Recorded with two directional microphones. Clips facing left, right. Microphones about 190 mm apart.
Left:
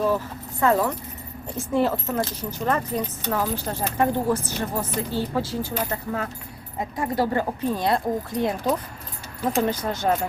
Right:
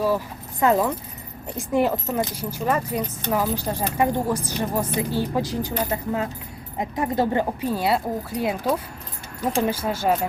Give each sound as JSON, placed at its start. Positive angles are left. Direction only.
{"t": 0.6, "sound": "speech", "side_deg": -15}
{"t": 7.8, "sound": "speech", "side_deg": -5}